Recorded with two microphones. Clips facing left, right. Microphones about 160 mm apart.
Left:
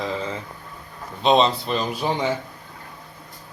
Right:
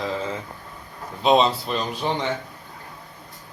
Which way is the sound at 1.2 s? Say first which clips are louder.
Even; 5° right (ahead or behind).